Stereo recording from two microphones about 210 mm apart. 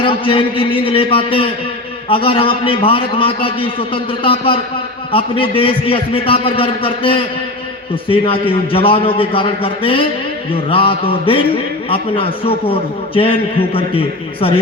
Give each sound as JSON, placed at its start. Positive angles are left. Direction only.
{"t": 0.0, "sound": "a man's voice", "side_deg": 25}